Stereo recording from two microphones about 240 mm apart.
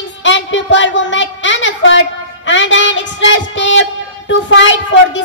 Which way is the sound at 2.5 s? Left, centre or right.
Left.